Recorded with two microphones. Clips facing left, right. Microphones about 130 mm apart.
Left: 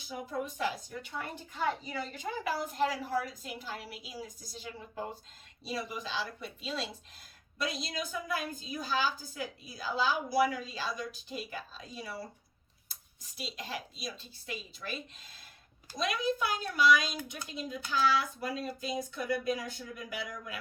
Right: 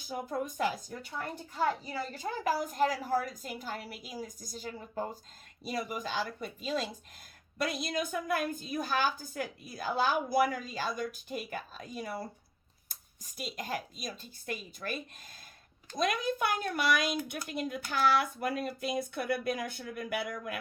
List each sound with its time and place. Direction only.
0.1 s a woman's voice: 45° right (ahead or behind)
2.1 s a woman's voice: 45° right (ahead or behind)